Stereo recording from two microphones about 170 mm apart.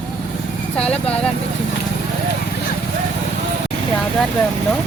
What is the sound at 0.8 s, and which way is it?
Speech, 5° left (ahead or behind).